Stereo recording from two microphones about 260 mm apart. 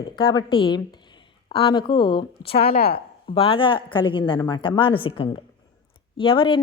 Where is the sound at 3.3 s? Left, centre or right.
Left.